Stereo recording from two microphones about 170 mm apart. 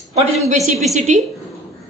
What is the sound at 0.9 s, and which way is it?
Speech, 45° right (ahead or behind).